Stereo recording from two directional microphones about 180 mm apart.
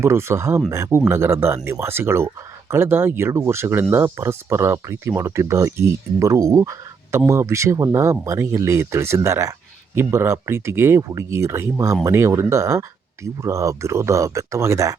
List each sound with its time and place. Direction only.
0.0 s speech: 15° right (ahead or behind)